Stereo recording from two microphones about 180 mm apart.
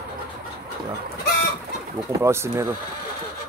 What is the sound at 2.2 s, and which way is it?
Speech, 15° right (ahead or behind).